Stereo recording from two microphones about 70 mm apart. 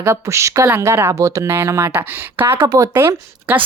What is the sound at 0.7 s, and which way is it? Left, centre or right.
Speech, right.